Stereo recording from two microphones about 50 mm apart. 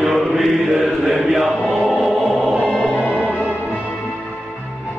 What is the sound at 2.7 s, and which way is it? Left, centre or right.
Music, centre.